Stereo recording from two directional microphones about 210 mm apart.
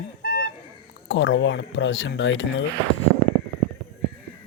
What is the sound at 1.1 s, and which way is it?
Speech, 60° left (ahead or behind).